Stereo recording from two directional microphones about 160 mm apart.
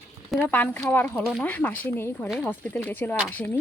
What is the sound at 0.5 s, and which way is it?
Speech, 10° left (ahead or behind).